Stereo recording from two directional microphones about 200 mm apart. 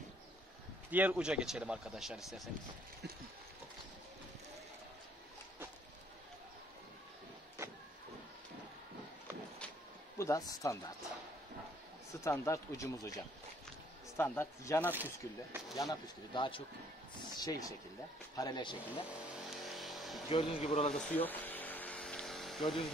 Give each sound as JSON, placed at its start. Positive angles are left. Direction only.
{"t": 0.9, "sound": "speech", "side_deg": -5}
{"t": 10.1, "sound": "speech", "side_deg": 15}
{"t": 12.2, "sound": "speech", "side_deg": 15}
{"t": 14.9, "sound": "speech", "side_deg": -10}
{"t": 15.7, "sound": "speech", "side_deg": 20}
{"t": 19.5, "sound": "vehicle", "side_deg": 0}
{"t": 20.2, "sound": "speech", "side_deg": 30}
{"t": 21.0, "sound": "a sound", "side_deg": 10}